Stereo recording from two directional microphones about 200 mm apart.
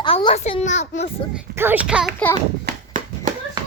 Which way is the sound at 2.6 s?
40° right (ahead or behind).